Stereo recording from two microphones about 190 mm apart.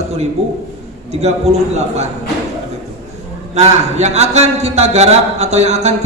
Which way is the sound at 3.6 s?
35° right (ahead or behind).